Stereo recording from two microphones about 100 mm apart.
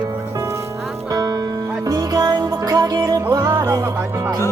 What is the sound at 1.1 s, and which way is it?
Music, 40° right (ahead or behind).